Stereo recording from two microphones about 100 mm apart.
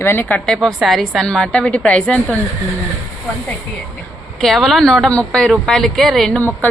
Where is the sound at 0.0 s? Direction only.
20° left (ahead or behind).